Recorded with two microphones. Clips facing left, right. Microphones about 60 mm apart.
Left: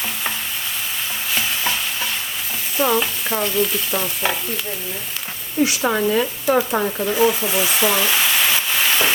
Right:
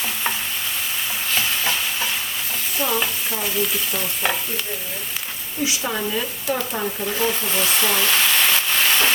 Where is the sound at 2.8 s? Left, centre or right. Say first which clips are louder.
Left 6 dB; centre.